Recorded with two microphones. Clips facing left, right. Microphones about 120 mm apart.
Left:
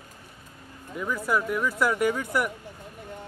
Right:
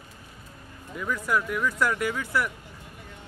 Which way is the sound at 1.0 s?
15° left (ahead or behind).